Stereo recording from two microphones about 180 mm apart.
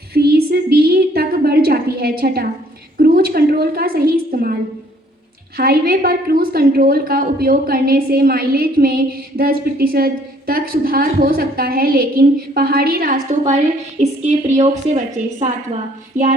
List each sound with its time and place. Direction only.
0.1 s a sound: 60° right (ahead or behind)
5.5 s a woman's voice: 55° right (ahead or behind)
14.0 s a woman's voice: 40° right (ahead or behind)